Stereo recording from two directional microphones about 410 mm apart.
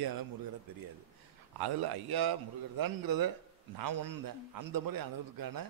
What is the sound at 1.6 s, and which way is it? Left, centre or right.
A man's voice, right.